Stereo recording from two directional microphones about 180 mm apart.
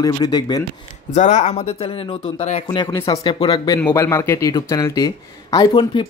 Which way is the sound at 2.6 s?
20° left (ahead or behind).